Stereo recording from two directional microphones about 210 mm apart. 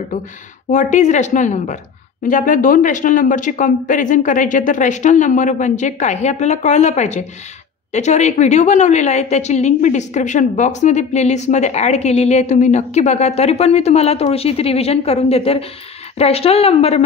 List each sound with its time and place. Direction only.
0.7 s a woman's voice: 35° left (ahead or behind)